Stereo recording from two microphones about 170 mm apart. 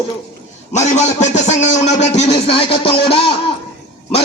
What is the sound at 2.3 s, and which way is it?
Music, 30° left (ahead or behind).